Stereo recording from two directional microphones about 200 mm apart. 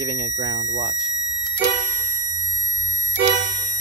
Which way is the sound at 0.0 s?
15° right (ahead or behind).